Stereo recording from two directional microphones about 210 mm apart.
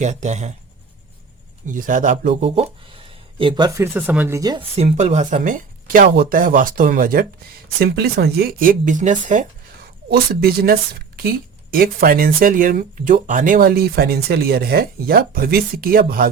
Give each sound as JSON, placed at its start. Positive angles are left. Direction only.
{"t": 0.0, "sound": "speech", "side_deg": -35}
{"t": 1.6, "sound": "speech", "side_deg": -40}
{"t": 4.8, "sound": "speech", "side_deg": -30}
{"t": 10.1, "sound": "speech", "side_deg": -45}